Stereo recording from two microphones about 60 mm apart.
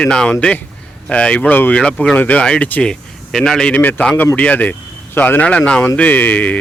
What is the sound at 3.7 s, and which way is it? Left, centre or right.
Speech, left.